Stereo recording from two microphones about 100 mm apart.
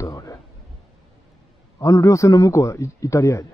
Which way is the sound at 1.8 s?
30° left (ahead or behind).